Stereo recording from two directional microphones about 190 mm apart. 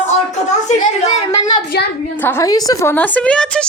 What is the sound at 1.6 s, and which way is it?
Speech, 60° left (ahead or behind).